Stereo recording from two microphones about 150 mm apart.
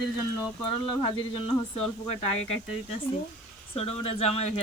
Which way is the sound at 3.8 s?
40° left (ahead or behind).